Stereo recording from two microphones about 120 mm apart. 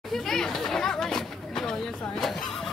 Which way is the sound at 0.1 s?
5° left (ahead or behind).